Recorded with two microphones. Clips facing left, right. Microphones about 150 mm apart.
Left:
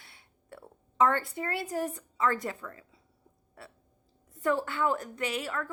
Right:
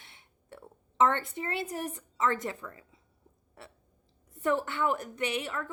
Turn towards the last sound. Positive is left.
turn(degrees=-20)  # may be behind; listen again after turning